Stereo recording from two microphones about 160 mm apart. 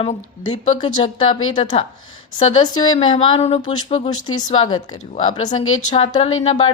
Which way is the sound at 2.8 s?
30° left (ahead or behind).